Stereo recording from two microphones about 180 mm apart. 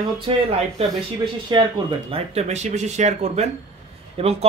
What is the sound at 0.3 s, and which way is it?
Speech, 30° right (ahead or behind).